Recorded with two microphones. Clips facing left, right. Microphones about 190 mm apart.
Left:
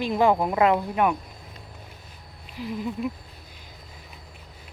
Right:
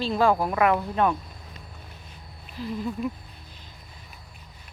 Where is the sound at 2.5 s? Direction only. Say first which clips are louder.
Even; 15° left (ahead or behind).